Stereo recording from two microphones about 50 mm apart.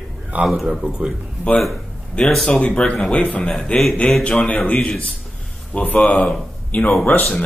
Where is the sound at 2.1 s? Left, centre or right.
Left.